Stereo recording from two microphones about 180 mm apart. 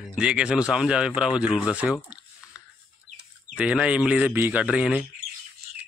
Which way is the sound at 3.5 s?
5° right (ahead or behind).